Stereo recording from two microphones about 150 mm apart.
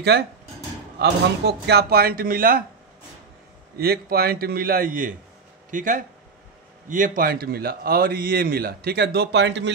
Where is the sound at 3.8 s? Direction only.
90° right.